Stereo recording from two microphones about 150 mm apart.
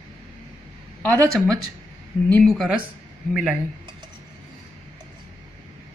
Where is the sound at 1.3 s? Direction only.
5° left (ahead or behind).